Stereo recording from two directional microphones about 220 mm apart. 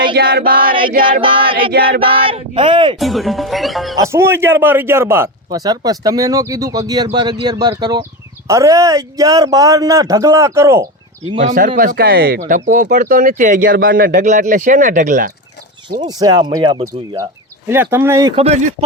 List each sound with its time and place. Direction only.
0.1 s a sound: 45° right (ahead or behind)
1.2 s speech: 25° right (ahead or behind)
1.7 s a sound: 45° right (ahead or behind)
2.0 s speech: 25° right (ahead or behind)
3.0 s speech: centre (ahead or behind)
4.0 s a man's voice: 10° right (ahead or behind)
11.3 s speech: 40° right (ahead or behind)
16.0 s a man's voice: 15° right (ahead or behind)
17.7 s a man's voice: 10° right (ahead or behind)
18.3 s speech: 30° right (ahead or behind)